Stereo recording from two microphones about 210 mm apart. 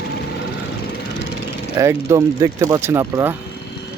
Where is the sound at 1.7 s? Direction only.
15° right (ahead or behind).